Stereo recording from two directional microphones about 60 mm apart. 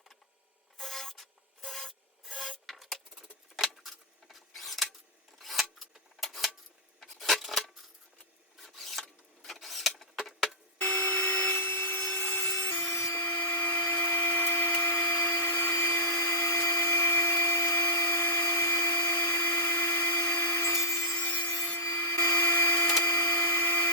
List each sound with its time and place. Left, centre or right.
0.8 s rub: centre
5.4 s scissors: centre
7.0 s keys jangling: centre
8.5 s filing: centre
10.0 s rodents: centre
10.8 s wood: left
11.5 s wood: left
13.2 s a sound: left
16.2 s vacuum cleaner: left
17.7 s a sound: left
20.7 s wood: left
21.1 s wood: left
21.8 s printer: left